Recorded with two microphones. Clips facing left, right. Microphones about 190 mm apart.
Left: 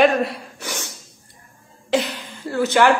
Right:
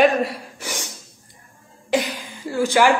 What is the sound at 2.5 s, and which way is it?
Speech, 10° right (ahead or behind).